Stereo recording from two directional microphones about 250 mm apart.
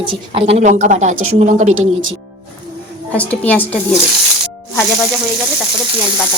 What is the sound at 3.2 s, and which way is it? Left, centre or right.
Speech, centre.